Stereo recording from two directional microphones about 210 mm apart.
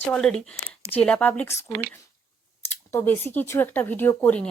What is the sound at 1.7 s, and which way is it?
Speech, 45° right (ahead or behind).